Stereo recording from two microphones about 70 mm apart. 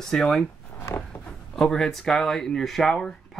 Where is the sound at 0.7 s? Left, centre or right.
Left.